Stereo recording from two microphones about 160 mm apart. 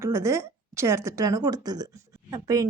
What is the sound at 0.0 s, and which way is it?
A woman's voice, 15° right (ahead or behind).